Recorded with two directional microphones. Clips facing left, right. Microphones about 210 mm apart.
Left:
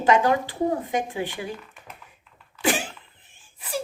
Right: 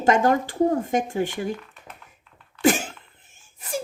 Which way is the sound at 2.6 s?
45° right (ahead or behind).